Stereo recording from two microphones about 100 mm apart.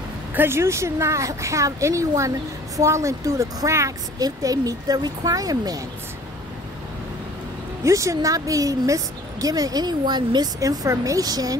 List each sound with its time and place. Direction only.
0.3 s a woman's voice: 20° right (ahead or behind); by 5.8 s 35° right (ahead or behind)
7.8 s a woman's voice: 30° right (ahead or behind)